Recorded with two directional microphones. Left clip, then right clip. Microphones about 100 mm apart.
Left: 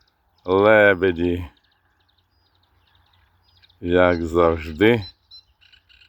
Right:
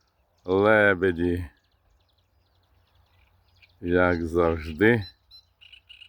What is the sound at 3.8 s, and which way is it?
Speech, 15° right (ahead or behind).